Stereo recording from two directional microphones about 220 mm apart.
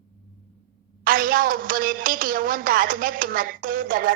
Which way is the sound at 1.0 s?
40° right (ahead or behind).